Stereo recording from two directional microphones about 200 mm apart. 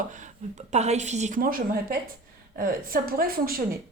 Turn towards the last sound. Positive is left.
turn(degrees=-45)  # may be behind; listen again after turning